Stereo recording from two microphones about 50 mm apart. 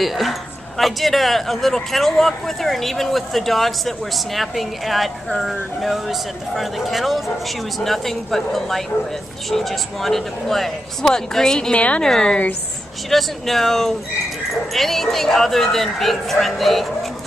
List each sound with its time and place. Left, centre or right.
0.0 s a woman's voice: centre
11.7 s a woman's voice: left
12.0 s a woman's voice: centre
13.1 s speech: centre